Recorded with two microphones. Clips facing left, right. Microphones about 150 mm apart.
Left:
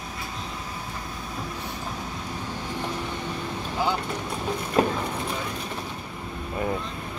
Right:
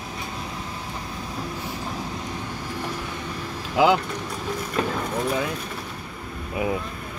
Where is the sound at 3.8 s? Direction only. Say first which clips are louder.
Right 9 dB; 90° right.